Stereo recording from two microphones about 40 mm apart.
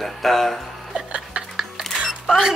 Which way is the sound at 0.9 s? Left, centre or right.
Right.